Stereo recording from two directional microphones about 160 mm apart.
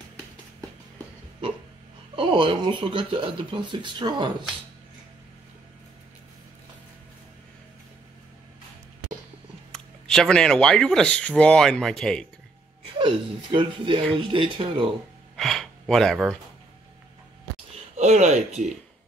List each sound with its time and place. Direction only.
2.1 s speech: 30° right (ahead or behind)
9.7 s speech: 5° left (ahead or behind)
12.9 s speech: 30° right (ahead or behind)
15.3 s gasp: centre (ahead or behind)
17.9 s speech: 45° right (ahead or behind)